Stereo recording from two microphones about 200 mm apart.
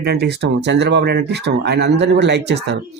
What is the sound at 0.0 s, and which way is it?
Speech, 55° right (ahead or behind).